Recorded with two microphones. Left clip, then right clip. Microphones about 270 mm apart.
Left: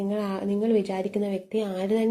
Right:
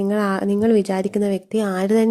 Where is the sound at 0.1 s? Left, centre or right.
Right.